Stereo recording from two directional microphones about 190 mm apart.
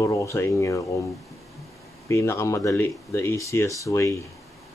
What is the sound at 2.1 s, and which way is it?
Speech, 15° left (ahead or behind).